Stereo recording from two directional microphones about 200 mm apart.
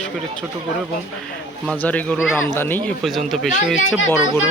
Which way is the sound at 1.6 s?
5° left (ahead or behind).